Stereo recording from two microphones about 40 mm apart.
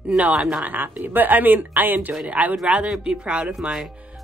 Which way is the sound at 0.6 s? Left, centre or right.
Right.